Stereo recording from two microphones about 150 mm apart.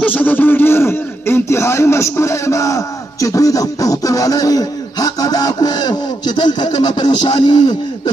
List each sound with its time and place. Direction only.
0.0 s speech: 10° left (ahead or behind); by 7.7 s 35° left (ahead or behind)